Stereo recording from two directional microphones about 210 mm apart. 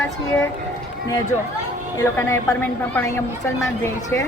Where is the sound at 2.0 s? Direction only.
15° left (ahead or behind).